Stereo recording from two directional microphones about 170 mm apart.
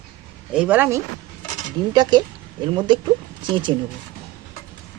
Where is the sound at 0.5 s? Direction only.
10° right (ahead or behind).